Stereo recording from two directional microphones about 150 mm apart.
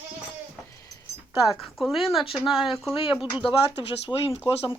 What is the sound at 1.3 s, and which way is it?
Speech, 5° right (ahead or behind).